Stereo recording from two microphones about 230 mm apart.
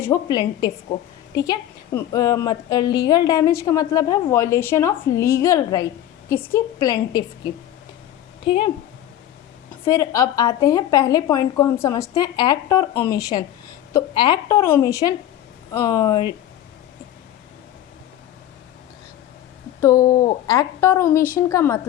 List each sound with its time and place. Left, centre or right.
0.0 s a woman's voice: centre
9.8 s a woman's voice: centre
19.8 s speech: centre
20.1 s speech: left
20.5 s a woman's voice: centre
21.2 s speech: left
21.5 s a woman's voice: centre